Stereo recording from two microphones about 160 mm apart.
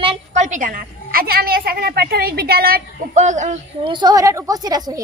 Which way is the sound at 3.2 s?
50° right (ahead or behind).